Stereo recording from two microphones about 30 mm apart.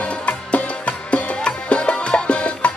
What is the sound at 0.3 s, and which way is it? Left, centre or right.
Music, left.